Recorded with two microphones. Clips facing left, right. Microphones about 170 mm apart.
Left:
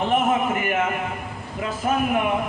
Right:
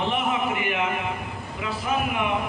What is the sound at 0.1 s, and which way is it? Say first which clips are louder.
Speech: left 5 dB; 45° left (ahead or behind).